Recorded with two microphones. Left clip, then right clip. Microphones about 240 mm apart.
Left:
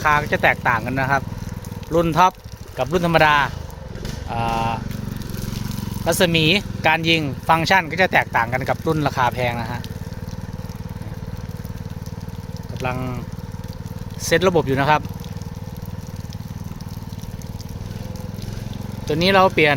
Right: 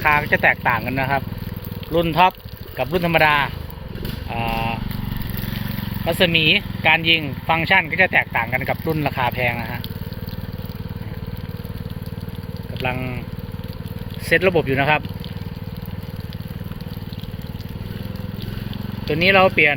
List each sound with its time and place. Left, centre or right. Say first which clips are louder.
0.0 s speech: right 1 dB; centre
6.1 s speech: right 1 dB; centre
12.8 s speech: right 1 dB; centre
14.3 s speech: even; centre
19.0 s speech: right 1 dB; centre